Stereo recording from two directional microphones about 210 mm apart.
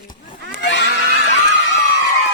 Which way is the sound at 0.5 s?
60° left (ahead or behind).